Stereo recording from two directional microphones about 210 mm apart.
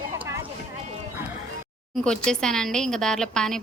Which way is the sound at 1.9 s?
5° left (ahead or behind).